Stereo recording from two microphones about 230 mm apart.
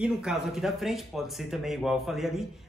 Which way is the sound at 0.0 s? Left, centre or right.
Centre.